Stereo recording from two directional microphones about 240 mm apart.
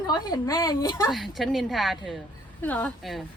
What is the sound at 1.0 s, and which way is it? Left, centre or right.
A woman's voice, centre.